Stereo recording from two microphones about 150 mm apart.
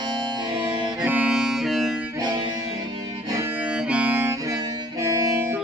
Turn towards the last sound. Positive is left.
turn(degrees=-20)  # may be behind; listen again after turning